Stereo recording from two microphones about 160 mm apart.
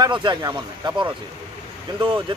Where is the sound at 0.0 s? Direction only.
30° right (ahead or behind).